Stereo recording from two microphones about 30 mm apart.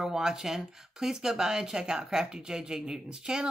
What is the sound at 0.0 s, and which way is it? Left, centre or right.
Speech, centre.